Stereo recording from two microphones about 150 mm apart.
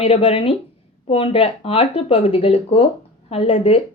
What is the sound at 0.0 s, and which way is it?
A woman's voice, 40° left (ahead or behind).